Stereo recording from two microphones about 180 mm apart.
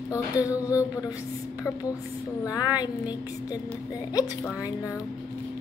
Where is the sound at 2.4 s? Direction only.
20° left (ahead or behind).